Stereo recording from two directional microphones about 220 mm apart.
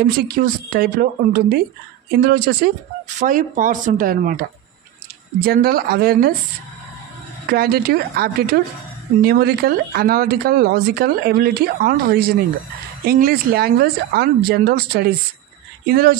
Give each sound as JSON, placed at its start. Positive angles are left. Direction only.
{"t": 0.0, "sound": "speech", "side_deg": -40}
{"t": 7.4, "sound": "speech", "side_deg": -45}